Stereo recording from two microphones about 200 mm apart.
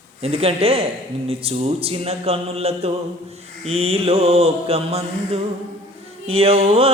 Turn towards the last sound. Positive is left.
turn(degrees=-30)  # may be behind; listen again after turning